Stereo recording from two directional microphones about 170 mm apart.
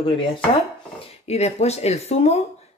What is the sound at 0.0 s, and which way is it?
Speech, 30° left (ahead or behind).